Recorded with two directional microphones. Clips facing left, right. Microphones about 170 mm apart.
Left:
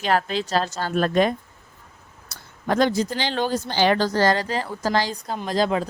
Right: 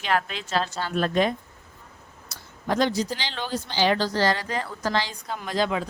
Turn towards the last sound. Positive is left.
turn(degrees=40)  # may be behind; listen again after turning